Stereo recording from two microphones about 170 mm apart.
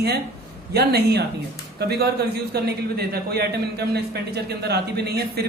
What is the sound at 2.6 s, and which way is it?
A man's voice, 70° right (ahead or behind).